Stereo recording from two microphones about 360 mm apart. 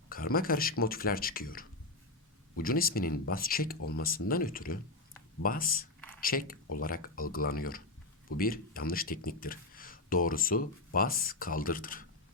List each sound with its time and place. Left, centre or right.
0.1 s speech: left